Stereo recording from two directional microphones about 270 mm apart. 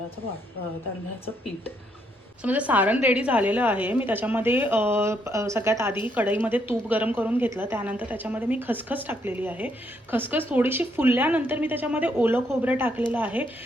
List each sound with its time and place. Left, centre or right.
2.4 s a woman's voice: centre